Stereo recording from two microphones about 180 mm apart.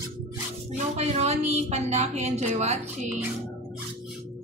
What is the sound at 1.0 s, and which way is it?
A woman's voice, 35° right (ahead or behind).